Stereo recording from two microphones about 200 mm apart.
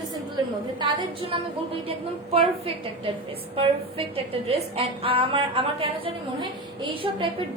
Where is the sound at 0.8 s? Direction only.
25° right (ahead or behind).